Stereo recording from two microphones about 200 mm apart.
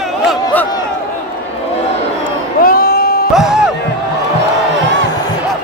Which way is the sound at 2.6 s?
45° left (ahead or behind).